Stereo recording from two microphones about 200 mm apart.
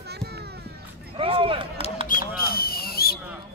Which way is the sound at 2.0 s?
50° left (ahead or behind).